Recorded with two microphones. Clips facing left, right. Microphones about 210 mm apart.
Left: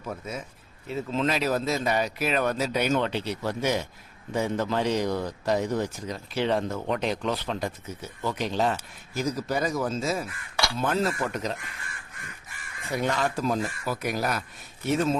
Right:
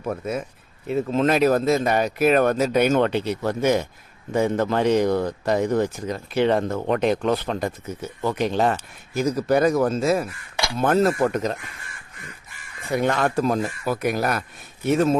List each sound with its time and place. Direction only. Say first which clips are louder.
0.0 s a man's voice: right 8 dB; 60° right (ahead or behind)
12.9 s a man's voice: right 5 dB; 55° right (ahead or behind)